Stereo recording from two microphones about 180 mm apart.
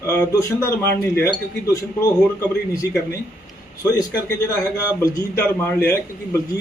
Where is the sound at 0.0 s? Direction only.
15° left (ahead or behind).